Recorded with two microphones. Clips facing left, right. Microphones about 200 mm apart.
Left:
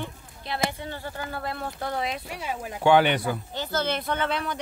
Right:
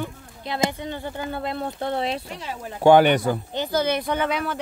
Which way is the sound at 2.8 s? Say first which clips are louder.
Right 5 dB; 45° right (ahead or behind).